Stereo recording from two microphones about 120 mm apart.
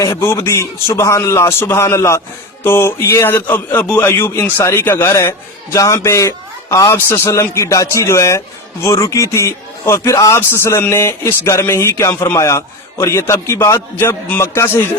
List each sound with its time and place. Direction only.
0.0 s a man's voice: 25° left (ahead or behind)